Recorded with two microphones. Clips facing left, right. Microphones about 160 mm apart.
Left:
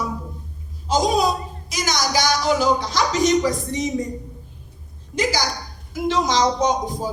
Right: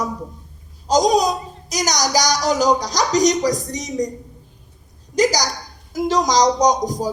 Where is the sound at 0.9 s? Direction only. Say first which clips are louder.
Right 3 dB; 40° right (ahead or behind).